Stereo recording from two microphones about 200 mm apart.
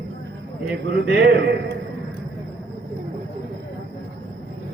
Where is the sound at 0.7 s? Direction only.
55° right (ahead or behind).